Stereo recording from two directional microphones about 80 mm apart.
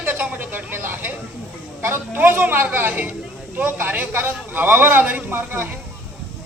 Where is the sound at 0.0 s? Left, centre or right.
Centre.